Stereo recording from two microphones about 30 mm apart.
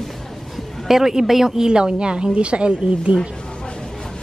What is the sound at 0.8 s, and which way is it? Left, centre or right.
Speech, centre.